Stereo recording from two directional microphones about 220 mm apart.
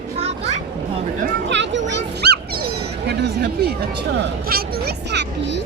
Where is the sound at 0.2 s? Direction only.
30° right (ahead or behind).